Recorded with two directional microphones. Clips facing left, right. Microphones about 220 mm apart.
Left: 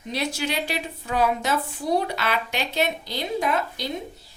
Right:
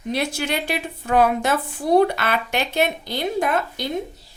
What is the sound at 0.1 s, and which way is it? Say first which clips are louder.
A woman's voice: right 3 dB; 50° right (ahead or behind).